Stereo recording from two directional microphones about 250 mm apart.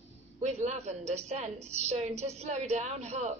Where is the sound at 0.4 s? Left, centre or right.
Right.